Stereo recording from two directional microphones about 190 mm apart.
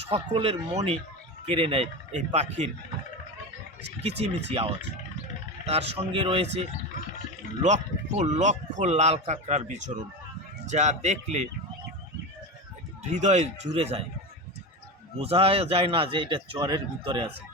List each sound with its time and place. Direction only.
0.1 s a man's voice: 30° right (ahead or behind)
4.4 s a man's voice: 30° right (ahead or behind)
7.6 s a man's voice: 40° right (ahead or behind)
13.0 s a man's voice: 40° right (ahead or behind)
15.2 s a man's voice: 30° right (ahead or behind)